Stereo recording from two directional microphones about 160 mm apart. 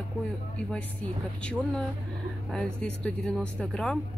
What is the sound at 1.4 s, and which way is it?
Speech, 5° left (ahead or behind).